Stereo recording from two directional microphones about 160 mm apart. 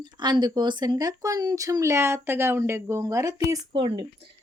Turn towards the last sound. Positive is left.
turn(degrees=-35)  # may be behind; listen again after turning